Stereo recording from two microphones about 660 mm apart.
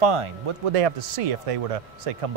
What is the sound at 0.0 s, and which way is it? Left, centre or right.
Speech, right.